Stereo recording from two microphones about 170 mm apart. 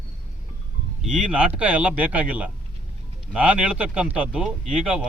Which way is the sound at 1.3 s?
5° right (ahead or behind).